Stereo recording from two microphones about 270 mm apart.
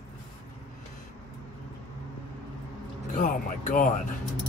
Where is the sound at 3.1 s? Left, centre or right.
Left.